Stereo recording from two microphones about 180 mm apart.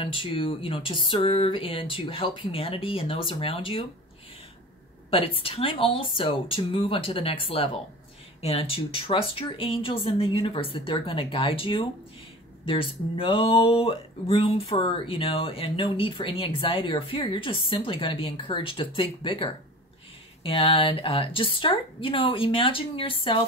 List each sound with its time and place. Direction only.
0.0 s speech: 30° left (ahead or behind)
5.1 s speech: 30° left (ahead or behind)